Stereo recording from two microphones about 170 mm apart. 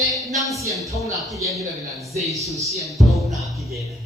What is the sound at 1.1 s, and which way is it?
A man's voice, centre (ahead or behind).